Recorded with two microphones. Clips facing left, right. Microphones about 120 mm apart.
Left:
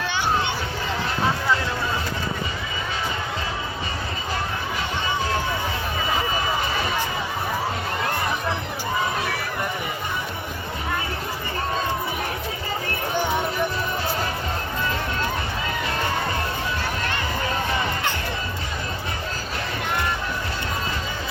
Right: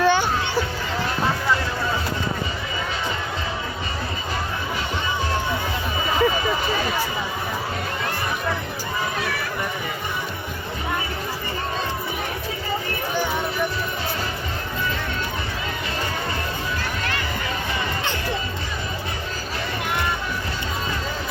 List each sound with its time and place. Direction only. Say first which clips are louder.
0.0 s hubbub: right 9 dB; 45° right (ahead or behind)